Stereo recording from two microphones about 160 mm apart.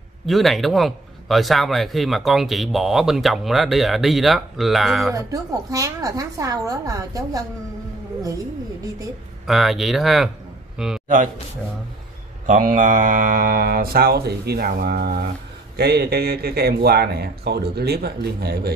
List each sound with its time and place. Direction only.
0.3 s speech: centre (ahead or behind)
5.1 s a woman's voice: 20° right (ahead or behind)
9.5 s speech: centre (ahead or behind)
12.4 s speech: 55° right (ahead or behind); by 15.2 s 75° right (ahead or behind)
15.7 s a man's voice: 85° right